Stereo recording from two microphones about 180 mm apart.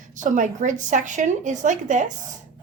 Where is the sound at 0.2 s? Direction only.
45° right (ahead or behind).